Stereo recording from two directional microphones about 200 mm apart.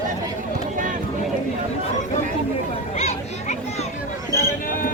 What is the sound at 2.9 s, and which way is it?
Children playing, 35° left (ahead or behind).